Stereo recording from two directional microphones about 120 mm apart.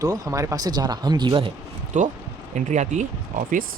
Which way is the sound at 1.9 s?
90° right.